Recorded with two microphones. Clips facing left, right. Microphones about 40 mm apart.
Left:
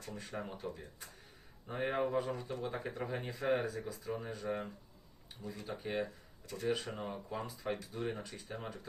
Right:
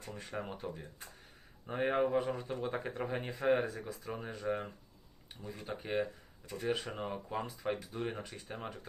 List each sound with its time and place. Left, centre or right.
0.0 s speech: right
1.6 s speech: centre
3.8 s speech: right